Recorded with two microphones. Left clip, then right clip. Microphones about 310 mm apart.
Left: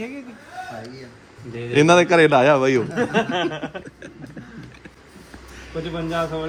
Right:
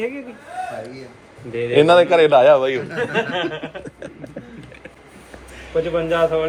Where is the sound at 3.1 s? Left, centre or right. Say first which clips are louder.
Even; left.